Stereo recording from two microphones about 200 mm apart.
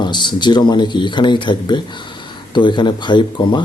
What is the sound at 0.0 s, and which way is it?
Speech, 20° left (ahead or behind).